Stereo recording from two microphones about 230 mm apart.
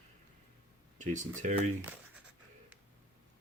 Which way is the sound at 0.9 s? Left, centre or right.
Right.